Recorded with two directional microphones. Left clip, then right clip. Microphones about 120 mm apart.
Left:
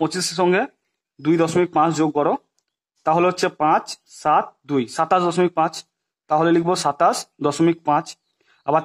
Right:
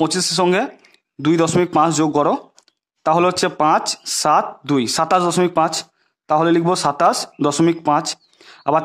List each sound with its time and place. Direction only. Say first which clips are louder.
0.0 s speech: right 3 dB; 55° right (ahead or behind)